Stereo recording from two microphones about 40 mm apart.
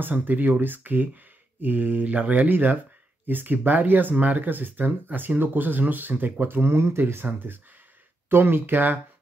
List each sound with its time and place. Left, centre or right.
0.0 s speech: right
2.5 s speech: right
6.4 s speech: right
7.2 s speech: right